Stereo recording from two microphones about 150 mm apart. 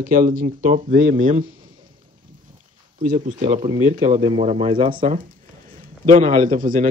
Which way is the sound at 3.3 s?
60° right (ahead or behind).